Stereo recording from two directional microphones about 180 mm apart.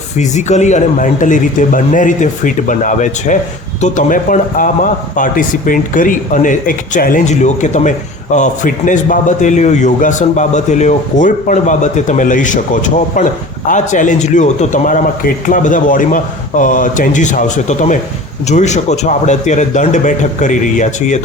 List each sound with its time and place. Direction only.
0.2 s a man's voice: 40° left (ahead or behind)